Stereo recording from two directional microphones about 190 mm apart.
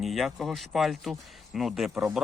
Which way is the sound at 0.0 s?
Centre (ahead or behind).